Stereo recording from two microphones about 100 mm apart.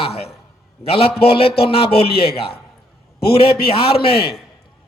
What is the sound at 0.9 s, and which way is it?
A man's voice, 70° left (ahead or behind).